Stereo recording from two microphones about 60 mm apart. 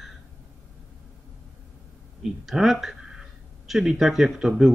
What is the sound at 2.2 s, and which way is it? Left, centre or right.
Speech, centre.